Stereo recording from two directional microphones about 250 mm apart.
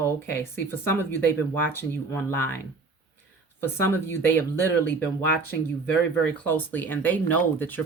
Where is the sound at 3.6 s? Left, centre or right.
Centre.